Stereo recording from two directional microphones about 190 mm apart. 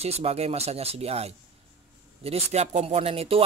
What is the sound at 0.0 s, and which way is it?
Speech, 35° right (ahead or behind).